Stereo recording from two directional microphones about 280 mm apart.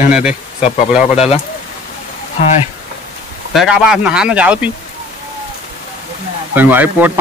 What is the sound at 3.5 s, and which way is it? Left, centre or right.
Speech, centre.